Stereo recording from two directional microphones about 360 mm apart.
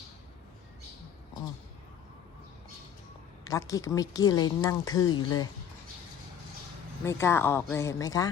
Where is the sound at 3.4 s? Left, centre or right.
Centre.